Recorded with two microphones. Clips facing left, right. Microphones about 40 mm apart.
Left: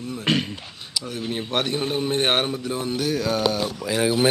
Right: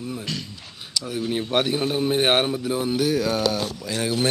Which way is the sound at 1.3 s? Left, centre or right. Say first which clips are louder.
Right 2 dB; centre.